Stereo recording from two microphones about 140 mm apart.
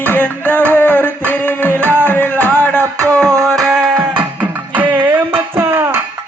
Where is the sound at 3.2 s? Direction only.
20° right (ahead or behind).